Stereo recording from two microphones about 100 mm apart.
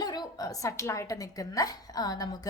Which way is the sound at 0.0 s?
40° left (ahead or behind).